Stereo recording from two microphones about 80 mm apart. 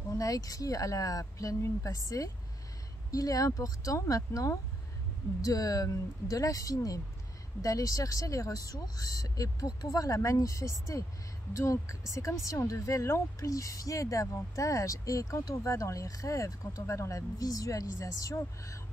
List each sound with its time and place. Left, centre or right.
0.2 s speech: left